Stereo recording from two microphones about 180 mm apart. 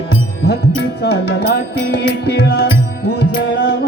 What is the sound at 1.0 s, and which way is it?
Music, 65° left (ahead or behind).